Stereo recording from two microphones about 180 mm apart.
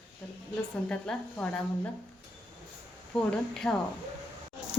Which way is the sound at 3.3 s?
5° left (ahead or behind).